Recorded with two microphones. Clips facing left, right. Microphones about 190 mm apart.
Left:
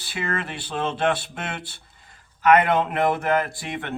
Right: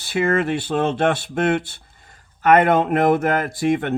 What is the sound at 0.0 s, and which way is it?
Speech, 45° right (ahead or behind).